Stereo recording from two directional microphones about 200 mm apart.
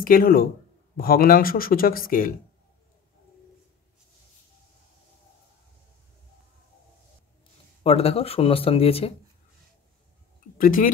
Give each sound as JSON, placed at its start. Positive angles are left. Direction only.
{"t": 0.0, "sound": "speech", "side_deg": 45}
{"t": 7.8, "sound": "speech", "side_deg": 30}
{"t": 10.6, "sound": "speech", "side_deg": 45}